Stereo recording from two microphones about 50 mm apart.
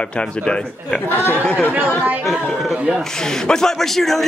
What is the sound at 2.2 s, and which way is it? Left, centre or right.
Speech, centre.